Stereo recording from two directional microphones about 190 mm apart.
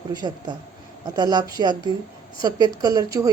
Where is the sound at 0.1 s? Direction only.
20° right (ahead or behind).